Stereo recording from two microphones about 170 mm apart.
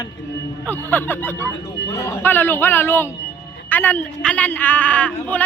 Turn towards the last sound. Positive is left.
turn(degrees=10)  # may be behind; listen again after turning